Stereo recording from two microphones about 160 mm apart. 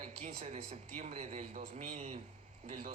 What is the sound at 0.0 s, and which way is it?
Speech, 40° right (ahead or behind).